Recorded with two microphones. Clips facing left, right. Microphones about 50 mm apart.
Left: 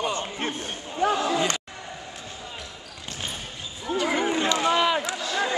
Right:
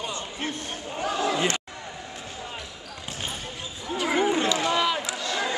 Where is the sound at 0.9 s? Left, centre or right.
Left.